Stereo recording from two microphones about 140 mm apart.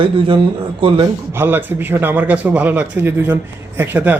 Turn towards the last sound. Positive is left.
turn(degrees=-15)  # may be behind; listen again after turning